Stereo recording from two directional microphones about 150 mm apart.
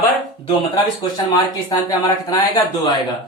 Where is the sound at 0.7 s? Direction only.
25° left (ahead or behind).